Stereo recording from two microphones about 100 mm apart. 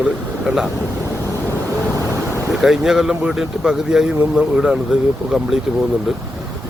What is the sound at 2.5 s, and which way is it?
Speech, 5° right (ahead or behind).